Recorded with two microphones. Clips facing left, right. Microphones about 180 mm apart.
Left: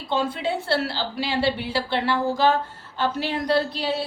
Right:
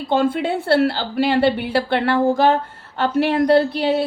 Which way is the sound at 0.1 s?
55° right (ahead or behind).